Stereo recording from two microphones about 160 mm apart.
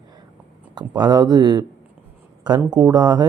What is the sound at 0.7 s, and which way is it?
Speech, 25° right (ahead or behind).